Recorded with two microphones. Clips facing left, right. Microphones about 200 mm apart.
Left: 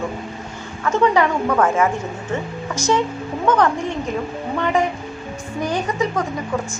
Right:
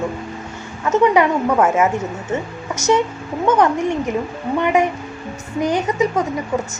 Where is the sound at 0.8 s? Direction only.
20° right (ahead or behind).